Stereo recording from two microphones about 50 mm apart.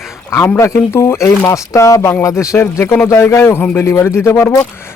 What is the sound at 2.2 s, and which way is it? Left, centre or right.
Speech, left.